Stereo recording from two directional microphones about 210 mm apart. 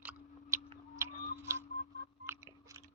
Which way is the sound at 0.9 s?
15° right (ahead or behind).